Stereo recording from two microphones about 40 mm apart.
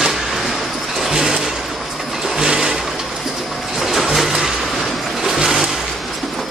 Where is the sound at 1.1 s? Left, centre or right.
Centre.